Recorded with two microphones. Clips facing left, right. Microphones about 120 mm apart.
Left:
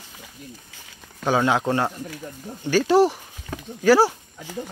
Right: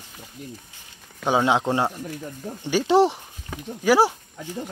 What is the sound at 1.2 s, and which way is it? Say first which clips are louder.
Speech: even; 20° right (ahead or behind).